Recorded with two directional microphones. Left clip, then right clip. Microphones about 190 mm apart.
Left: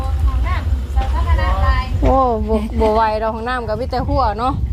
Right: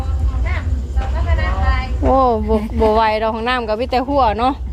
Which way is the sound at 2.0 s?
5° right (ahead or behind).